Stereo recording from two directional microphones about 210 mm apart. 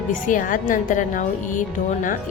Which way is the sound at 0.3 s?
40° left (ahead or behind).